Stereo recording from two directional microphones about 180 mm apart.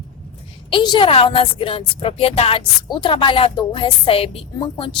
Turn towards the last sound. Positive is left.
turn(degrees=30)  # may be behind; listen again after turning